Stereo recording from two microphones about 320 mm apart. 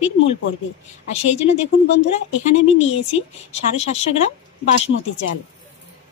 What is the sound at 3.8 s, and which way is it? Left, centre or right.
Speech, centre.